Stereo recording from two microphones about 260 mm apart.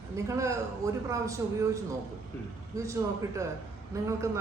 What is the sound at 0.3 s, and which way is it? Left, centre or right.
A man's voice, centre.